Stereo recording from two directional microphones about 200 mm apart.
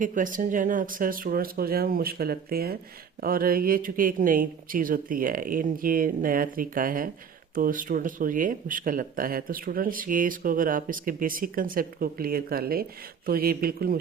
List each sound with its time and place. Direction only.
0.0 s speech: 40° right (ahead or behind)